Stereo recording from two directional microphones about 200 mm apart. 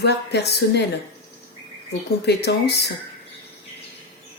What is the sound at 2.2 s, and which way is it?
Speech, 55° left (ahead or behind).